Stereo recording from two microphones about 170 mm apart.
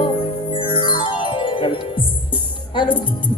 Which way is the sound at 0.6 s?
30° left (ahead or behind).